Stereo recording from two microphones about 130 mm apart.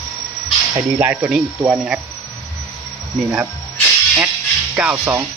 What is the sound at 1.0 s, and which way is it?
Speech, 15° right (ahead or behind).